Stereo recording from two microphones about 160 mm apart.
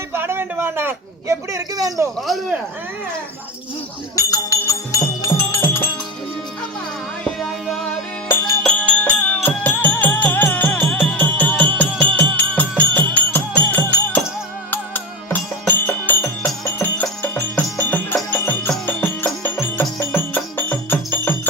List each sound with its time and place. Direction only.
0.1 s speech: 15° right (ahead or behind)
2.2 s speech: centre (ahead or behind)
4.1 s music: 20° left (ahead or behind)
7.3 s music: centre (ahead or behind)